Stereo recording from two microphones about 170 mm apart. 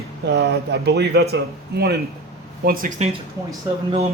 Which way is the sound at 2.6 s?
60° right (ahead or behind).